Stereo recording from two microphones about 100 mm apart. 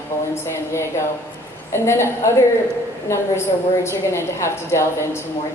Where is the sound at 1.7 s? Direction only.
25° left (ahead or behind).